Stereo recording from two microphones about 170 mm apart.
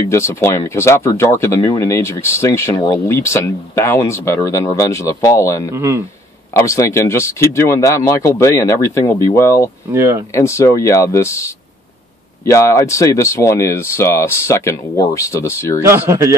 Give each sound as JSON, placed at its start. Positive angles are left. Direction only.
{"t": 0.1, "sound": "speech", "side_deg": 15}
{"t": 5.7, "sound": "speech", "side_deg": -15}
{"t": 6.6, "sound": "speech", "side_deg": 15}
{"t": 9.9, "sound": "speech", "side_deg": -20}
{"t": 10.3, "sound": "speech", "side_deg": 15}
{"t": 15.8, "sound": "speech", "side_deg": -15}